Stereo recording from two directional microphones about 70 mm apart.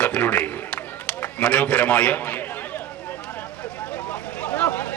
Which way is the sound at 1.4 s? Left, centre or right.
Centre.